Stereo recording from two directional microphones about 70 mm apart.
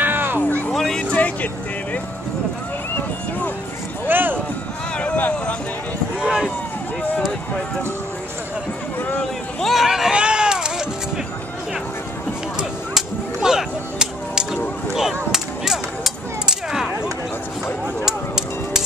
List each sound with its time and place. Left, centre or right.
0.0 s music: right
0.7 s music: centre
1.1 s speech: left
4.1 s speech: right
4.9 s speech: centre
6.2 s speech: centre
9.2 s a sound: centre
12.5 s chop: centre
15.3 s a sound: centre